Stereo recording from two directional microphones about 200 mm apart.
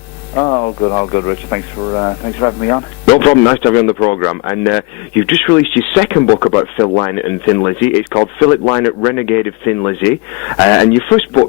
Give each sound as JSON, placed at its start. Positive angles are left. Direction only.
{"t": 0.3, "sound": "a man's voice", "side_deg": 20}